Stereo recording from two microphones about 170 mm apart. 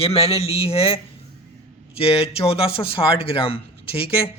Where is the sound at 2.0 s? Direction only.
35° left (ahead or behind).